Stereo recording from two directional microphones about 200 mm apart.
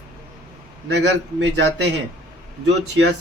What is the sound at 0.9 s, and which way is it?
Speech, 60° right (ahead or behind).